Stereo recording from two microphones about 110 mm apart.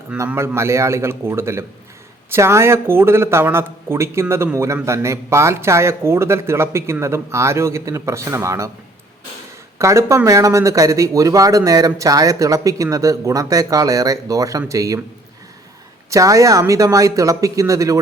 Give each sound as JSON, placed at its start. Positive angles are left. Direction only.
{"t": 0.3, "sound": "speech", "side_deg": -25}
{"t": 9.7, "sound": "speech", "side_deg": -25}
{"t": 16.0, "sound": "speech", "side_deg": -30}